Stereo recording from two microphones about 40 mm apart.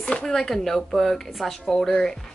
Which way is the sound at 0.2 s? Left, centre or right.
Centre.